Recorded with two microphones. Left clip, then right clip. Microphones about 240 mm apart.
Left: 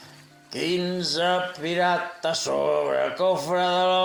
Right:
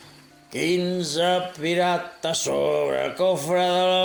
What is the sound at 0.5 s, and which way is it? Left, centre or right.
Speech, right.